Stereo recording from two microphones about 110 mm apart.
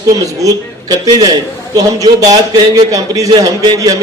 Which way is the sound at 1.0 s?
35° right (ahead or behind).